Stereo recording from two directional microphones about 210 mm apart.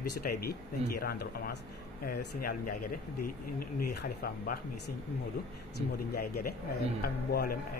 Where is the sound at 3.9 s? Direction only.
50° left (ahead or behind).